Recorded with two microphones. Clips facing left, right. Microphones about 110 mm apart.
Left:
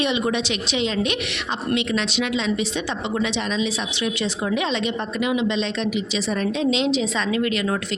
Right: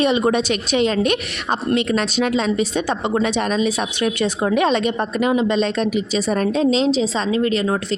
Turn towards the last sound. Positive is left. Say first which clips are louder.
# right 4 dB
turn(degrees=-35)  # may be behind; listen again after turning